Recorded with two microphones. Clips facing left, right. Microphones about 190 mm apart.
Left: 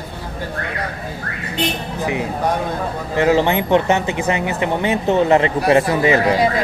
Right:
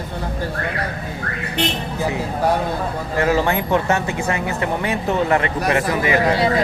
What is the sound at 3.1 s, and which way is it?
Speech, 20° left (ahead or behind).